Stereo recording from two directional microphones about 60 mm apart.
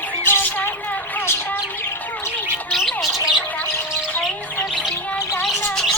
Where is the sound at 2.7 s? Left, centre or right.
Centre.